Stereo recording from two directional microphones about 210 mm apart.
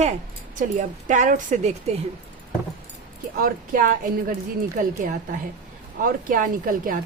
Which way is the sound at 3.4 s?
40° right (ahead or behind).